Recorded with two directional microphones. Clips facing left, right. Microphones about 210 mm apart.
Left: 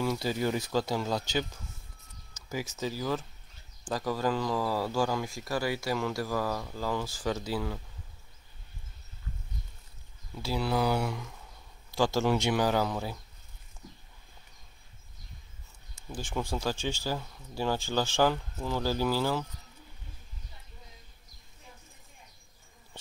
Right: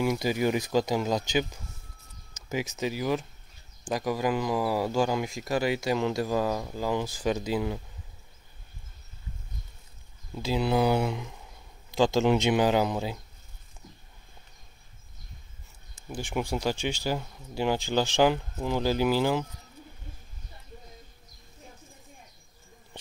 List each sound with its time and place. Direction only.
0.0 s speech: 15° right (ahead or behind)
10.4 s speech: 20° right (ahead or behind)
16.1 s speech: 15° right (ahead or behind)